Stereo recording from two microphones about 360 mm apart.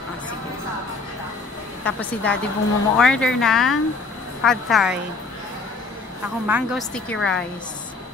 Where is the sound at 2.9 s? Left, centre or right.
Centre.